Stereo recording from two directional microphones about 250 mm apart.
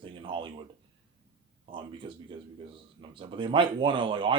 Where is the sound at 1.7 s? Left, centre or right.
Right.